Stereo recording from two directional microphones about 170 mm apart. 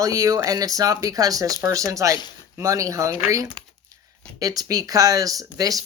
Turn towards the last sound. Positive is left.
turn(degrees=-20)  # may be behind; listen again after turning